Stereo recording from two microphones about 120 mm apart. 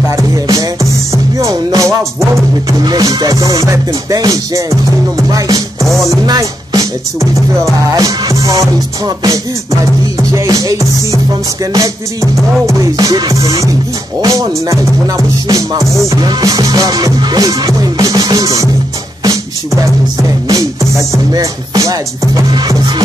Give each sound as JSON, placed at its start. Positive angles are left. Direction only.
{"t": 0.1, "sound": "music", "side_deg": -30}